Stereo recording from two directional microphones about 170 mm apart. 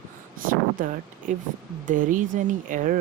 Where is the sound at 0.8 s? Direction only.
50° right (ahead or behind).